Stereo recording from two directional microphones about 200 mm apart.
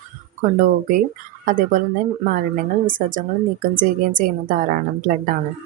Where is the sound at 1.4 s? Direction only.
45° right (ahead or behind).